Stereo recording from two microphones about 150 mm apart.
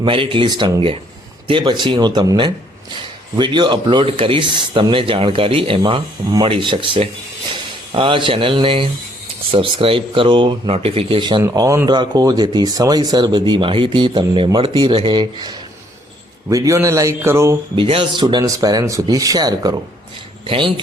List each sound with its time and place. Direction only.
0.0 s speech: 35° right (ahead or behind); by 17.6 s 20° right (ahead or behind)
17.8 s speech: 35° right (ahead or behind)